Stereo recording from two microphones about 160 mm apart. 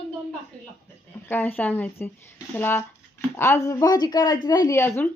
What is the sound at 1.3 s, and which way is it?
A woman's voice, 10° left (ahead or behind).